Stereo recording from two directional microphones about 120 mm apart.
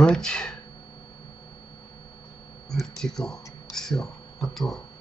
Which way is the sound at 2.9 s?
5° left (ahead or behind).